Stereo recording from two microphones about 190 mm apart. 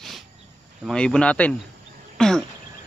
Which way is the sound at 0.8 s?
5° left (ahead or behind).